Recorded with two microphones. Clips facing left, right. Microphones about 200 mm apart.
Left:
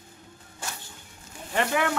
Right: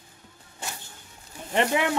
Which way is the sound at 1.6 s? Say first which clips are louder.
Right 2 dB; 20° right (ahead or behind).